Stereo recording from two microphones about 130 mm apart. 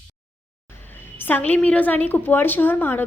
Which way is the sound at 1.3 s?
15° left (ahead or behind).